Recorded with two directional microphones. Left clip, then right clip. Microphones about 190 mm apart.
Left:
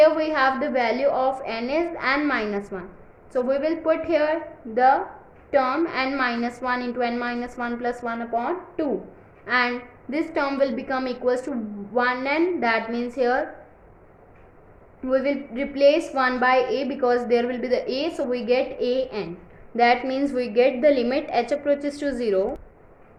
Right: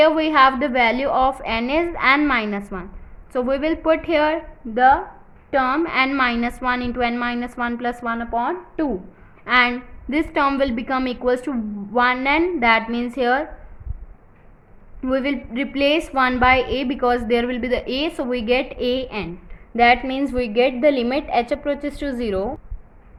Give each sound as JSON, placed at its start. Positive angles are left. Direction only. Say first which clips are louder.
{"t": 0.0, "sound": "a woman's voice", "louder": "right 4 dB", "side_deg": -40}
{"t": 9.4, "sound": "a woman's voice", "louder": "right 5 dB", "side_deg": -40}
{"t": 15.0, "sound": "a woman's voice", "louder": "even", "side_deg": -40}